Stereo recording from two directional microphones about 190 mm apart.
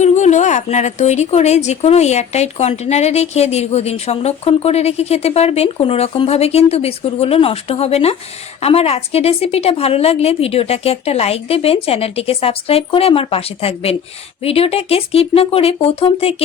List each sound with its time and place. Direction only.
0.0 s a woman's voice: 40° left (ahead or behind)